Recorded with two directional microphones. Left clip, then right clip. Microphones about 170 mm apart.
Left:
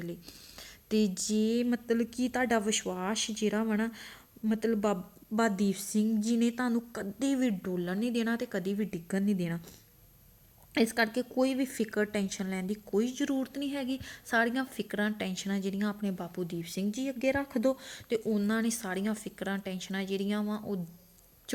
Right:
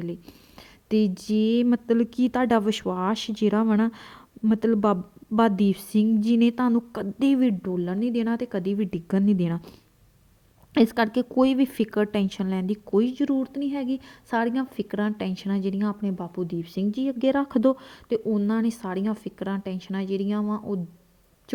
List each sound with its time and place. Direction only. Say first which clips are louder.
0.0 s a woman's voice: right 7 dB; 35° right (ahead or behind); by 9.7 s 55° right (ahead or behind)
10.8 s a woman's voice: right 6 dB; 55° right (ahead or behind); by 20.7 s 35° right (ahead or behind)